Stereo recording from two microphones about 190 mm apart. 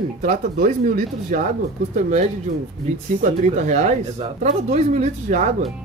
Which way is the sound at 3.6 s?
40° right (ahead or behind).